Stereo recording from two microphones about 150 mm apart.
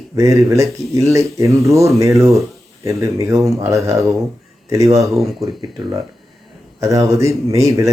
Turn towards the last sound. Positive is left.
turn(degrees=-20)  # may be behind; listen again after turning